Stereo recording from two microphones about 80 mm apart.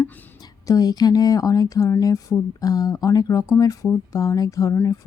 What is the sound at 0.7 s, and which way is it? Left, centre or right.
Speech, left.